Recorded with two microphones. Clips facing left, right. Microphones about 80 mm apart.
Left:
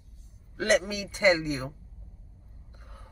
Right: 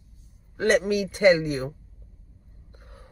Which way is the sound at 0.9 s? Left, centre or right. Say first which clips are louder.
Right 5 dB; right.